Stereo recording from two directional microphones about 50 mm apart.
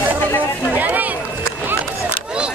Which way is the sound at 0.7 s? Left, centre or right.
Right.